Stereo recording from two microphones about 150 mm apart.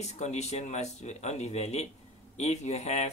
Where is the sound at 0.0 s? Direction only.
50° left (ahead or behind).